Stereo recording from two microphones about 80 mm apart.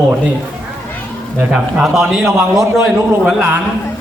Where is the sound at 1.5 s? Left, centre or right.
Centre.